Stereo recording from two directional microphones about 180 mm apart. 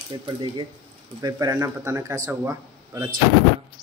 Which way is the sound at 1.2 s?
20° right (ahead or behind).